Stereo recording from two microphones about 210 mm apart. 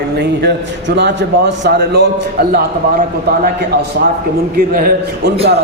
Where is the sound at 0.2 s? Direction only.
50° right (ahead or behind).